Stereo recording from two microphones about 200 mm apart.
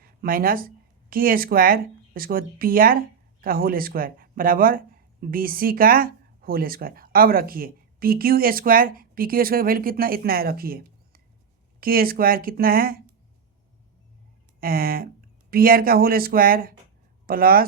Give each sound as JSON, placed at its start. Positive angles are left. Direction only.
{"t": 0.2, "sound": "speech", "side_deg": -45}
{"t": 14.6, "sound": "speech", "side_deg": -45}